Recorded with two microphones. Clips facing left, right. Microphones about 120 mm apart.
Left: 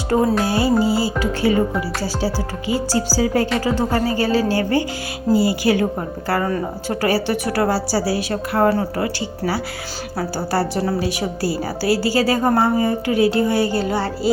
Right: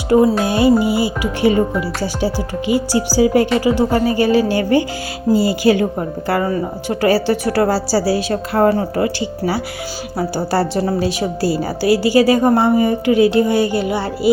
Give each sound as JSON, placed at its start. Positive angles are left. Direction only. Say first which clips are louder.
{"t": 0.4, "sound": "music", "louder": "right 4 dB", "side_deg": -20}
{"t": 2.6, "sound": "music", "louder": "right 3 dB", "side_deg": -15}
{"t": 3.9, "sound": "speech", "louder": "right 4 dB", "side_deg": 35}
{"t": 5.3, "sound": "a woman's voice", "louder": "right 3 dB", "side_deg": -25}
{"t": 6.2, "sound": "music", "louder": "right 2 dB", "side_deg": -15}
{"t": 7.1, "sound": "a woman's voice", "louder": "right 5 dB", "side_deg": -30}
{"t": 8.7, "sound": "a woman's voice", "louder": "right 3 dB", "side_deg": -20}